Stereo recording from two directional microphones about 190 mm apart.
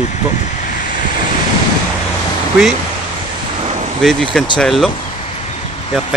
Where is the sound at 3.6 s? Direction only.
35° right (ahead or behind).